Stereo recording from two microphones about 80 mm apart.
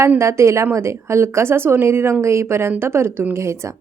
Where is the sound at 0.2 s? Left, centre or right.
Right.